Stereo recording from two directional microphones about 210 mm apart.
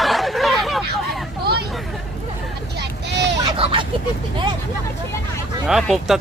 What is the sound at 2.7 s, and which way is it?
Vehicle, 55° right (ahead or behind).